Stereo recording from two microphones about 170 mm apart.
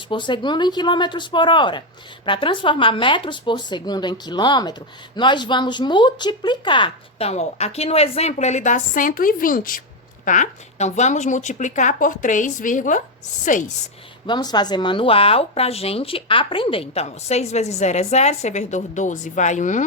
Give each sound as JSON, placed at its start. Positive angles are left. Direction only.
{"t": 0.1, "sound": "speech", "side_deg": 25}
{"t": 14.3, "sound": "speech", "side_deg": 25}